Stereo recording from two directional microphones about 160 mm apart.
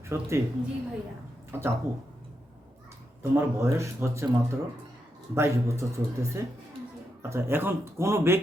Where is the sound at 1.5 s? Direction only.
15° right (ahead or behind).